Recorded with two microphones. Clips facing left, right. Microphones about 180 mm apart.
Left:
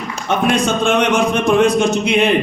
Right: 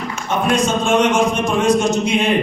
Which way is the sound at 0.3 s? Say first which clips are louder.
Left 1 dB; 60° left (ahead or behind).